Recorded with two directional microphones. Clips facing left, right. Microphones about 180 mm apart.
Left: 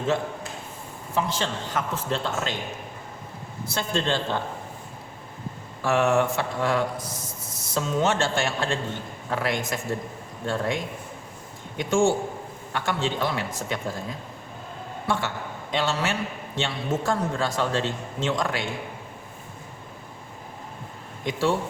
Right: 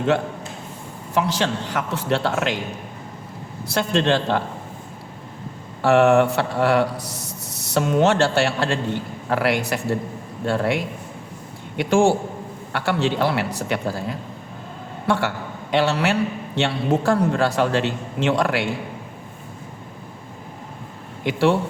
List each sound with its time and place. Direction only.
1.1 s speech: 75° right (ahead or behind)
3.7 s speech: 75° right (ahead or behind)
5.8 s a man's voice: 65° right (ahead or behind)